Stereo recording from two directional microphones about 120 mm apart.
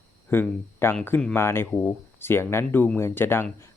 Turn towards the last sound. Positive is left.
turn(degrees=20)  # may be behind; listen again after turning